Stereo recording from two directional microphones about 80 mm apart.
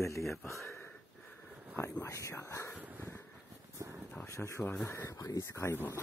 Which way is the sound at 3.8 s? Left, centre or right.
Right.